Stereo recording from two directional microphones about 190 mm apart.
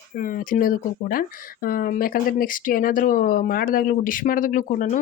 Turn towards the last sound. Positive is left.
turn(degrees=45)  # may be behind; listen again after turning